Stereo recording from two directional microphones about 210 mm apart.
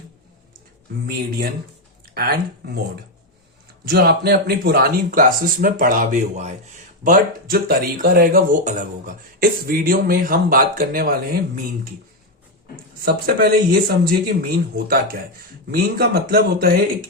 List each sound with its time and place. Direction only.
2.1 s speech: 45° right (ahead or behind)
3.8 s speech: 50° right (ahead or behind)
13.2 s speech: 45° right (ahead or behind)